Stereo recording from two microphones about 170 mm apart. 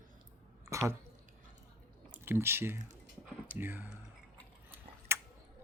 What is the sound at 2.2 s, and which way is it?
Speech, 15° right (ahead or behind).